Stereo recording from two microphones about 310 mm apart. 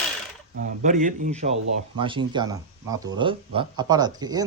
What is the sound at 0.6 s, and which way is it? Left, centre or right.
A man's voice, right.